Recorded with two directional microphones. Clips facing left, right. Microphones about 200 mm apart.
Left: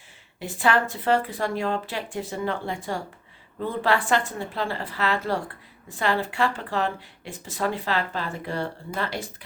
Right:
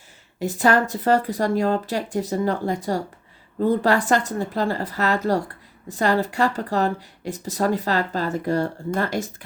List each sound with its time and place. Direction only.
0.3 s speech: 40° right (ahead or behind)